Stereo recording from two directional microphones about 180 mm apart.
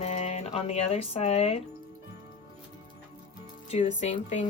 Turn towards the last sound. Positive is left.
turn(degrees=40)  # may be behind; listen again after turning